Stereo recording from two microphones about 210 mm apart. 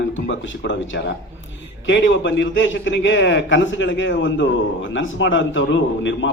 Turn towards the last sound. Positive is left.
turn(degrees=60)  # may be behind; listen again after turning